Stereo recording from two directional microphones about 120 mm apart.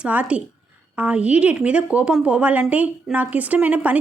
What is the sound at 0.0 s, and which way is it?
Speech, 10° right (ahead or behind).